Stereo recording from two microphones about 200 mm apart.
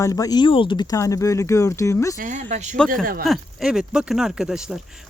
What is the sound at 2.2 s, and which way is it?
Speech, 40° right (ahead or behind).